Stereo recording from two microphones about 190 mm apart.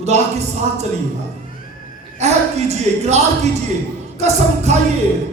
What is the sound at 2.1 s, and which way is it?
Speech, 35° right (ahead or behind).